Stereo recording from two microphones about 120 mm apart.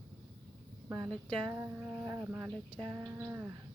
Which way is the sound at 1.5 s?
20° right (ahead or behind).